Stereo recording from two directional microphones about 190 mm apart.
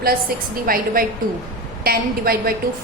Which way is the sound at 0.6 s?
50° right (ahead or behind).